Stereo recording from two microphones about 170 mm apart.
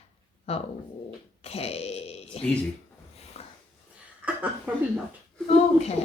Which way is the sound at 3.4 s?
35° left (ahead or behind).